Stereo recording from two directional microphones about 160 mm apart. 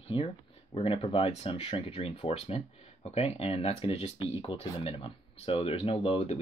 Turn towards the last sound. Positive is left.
turn(degrees=35)  # may be behind; listen again after turning